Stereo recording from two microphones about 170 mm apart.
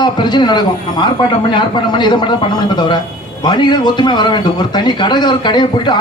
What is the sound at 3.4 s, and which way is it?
A man's voice, 25° left (ahead or behind).